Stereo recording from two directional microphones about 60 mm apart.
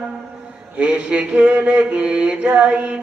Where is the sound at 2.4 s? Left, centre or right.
Right.